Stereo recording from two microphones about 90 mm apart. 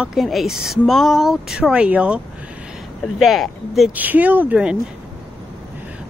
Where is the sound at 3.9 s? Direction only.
20° right (ahead or behind).